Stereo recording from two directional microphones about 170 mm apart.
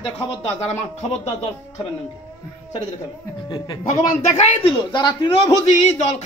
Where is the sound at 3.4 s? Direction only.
25° left (ahead or behind).